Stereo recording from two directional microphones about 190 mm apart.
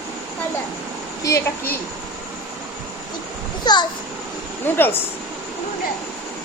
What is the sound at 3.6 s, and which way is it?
Speech, 20° left (ahead or behind).